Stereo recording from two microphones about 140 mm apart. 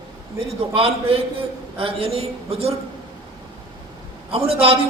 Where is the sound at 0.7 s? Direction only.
45° right (ahead or behind).